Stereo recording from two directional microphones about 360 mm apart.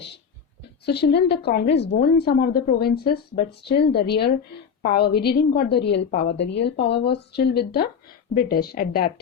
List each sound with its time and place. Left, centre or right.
0.9 s a woman's voice: left